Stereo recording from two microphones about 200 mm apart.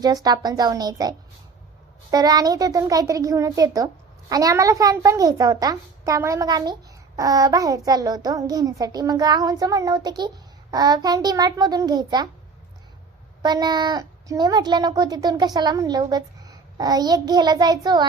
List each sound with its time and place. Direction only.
0.0 s a child's voice: 20° right (ahead or behind)
13.4 s speech: 20° right (ahead or behind)